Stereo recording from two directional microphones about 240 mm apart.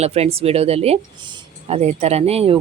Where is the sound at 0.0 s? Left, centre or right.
Right.